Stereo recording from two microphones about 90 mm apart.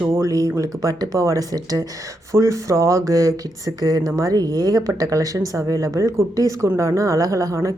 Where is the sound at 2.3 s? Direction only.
35° right (ahead or behind).